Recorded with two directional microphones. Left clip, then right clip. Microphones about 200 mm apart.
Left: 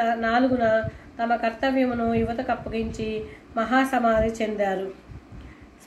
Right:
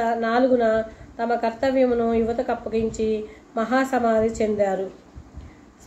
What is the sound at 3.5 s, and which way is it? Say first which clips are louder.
Speech: even; 45° right (ahead or behind).